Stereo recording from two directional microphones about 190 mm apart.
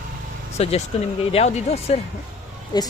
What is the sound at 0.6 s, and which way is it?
A man's voice, 35° left (ahead or behind).